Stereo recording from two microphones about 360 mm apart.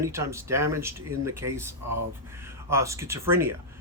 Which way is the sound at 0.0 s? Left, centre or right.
Centre.